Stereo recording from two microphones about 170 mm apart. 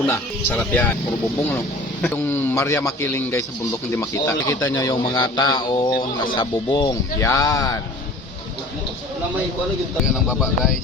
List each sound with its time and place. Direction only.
0.1 s speech: 10° left (ahead or behind)
2.0 s speech: 10° left (ahead or behind)